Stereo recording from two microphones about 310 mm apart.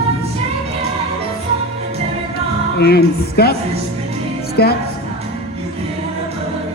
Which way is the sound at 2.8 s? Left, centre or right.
Left.